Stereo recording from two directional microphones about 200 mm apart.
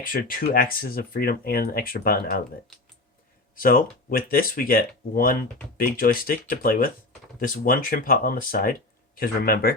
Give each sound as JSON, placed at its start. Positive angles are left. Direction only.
{"t": 0.0, "sound": "speech", "side_deg": 45}
{"t": 3.5, "sound": "speech", "side_deg": 45}